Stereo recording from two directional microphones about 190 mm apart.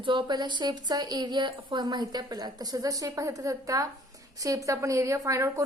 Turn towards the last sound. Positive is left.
turn(degrees=-15)  # may be behind; listen again after turning